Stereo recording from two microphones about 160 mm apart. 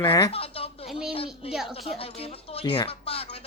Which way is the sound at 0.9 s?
5° right (ahead or behind).